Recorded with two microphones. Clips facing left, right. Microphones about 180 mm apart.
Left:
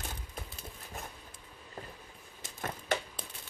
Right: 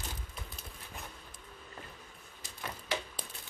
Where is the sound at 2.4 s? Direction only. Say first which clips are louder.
Left 4 dB; 45° left (ahead or behind).